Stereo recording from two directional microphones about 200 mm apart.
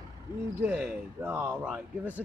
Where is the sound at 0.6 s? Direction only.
10° right (ahead or behind).